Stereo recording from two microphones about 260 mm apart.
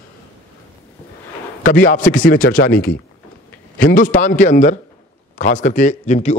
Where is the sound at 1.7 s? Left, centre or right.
Left.